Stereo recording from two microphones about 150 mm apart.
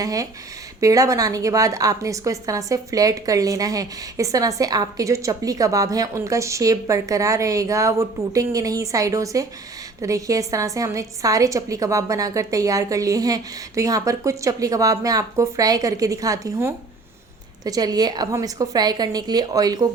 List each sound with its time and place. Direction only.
0.0 s a woman's voice: 25° right (ahead or behind)